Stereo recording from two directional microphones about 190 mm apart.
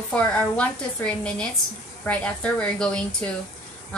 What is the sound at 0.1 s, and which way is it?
A woman's voice, 5° left (ahead or behind).